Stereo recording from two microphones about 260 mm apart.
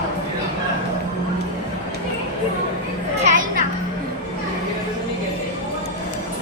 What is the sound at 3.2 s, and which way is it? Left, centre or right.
Children playing, right.